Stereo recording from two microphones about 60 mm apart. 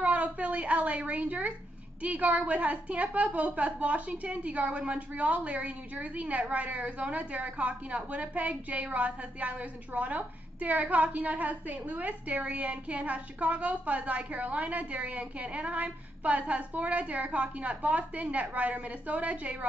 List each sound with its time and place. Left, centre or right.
0.0 s a woman's voice: right